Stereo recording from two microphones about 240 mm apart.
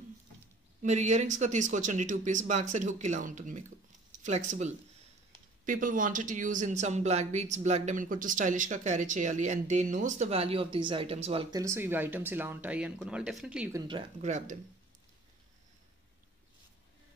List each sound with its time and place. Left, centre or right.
0.8 s speech: right
11.6 s speech: centre
13.8 s speech: right